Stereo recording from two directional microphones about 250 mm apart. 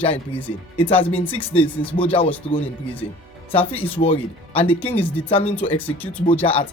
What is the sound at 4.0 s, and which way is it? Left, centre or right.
Speech, left.